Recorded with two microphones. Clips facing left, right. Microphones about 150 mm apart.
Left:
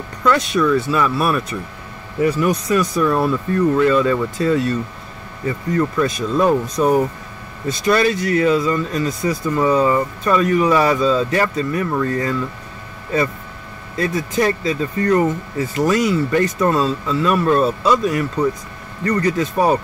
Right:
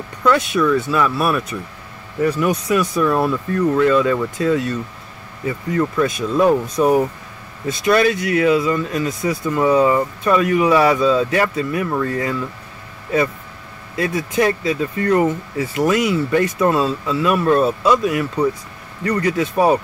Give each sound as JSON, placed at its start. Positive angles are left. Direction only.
{"t": 0.2, "sound": "speech", "side_deg": -5}
{"t": 13.9, "sound": "speech", "side_deg": -5}